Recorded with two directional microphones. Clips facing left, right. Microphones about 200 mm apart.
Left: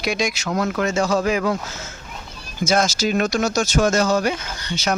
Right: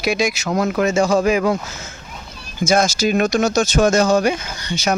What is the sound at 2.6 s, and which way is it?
Speech, 10° right (ahead or behind).